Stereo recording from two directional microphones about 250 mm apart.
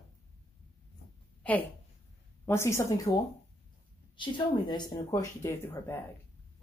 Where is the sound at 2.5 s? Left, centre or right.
Centre.